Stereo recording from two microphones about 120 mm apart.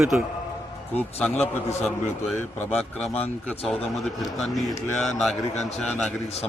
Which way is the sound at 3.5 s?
Centre (ahead or behind).